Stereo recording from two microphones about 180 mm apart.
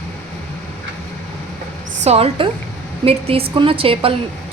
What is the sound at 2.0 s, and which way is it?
A woman's voice, 35° right (ahead or behind).